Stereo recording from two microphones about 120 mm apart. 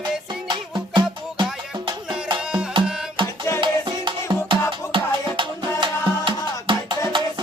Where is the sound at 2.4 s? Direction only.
5° right (ahead or behind).